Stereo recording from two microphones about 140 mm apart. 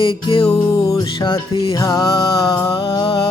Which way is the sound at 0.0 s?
40° left (ahead or behind).